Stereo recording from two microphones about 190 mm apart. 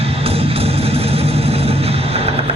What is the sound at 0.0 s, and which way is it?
Music, 30° right (ahead or behind).